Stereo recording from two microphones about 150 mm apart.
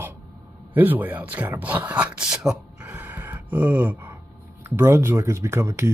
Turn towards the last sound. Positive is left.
turn(degrees=-20)  # may be behind; listen again after turning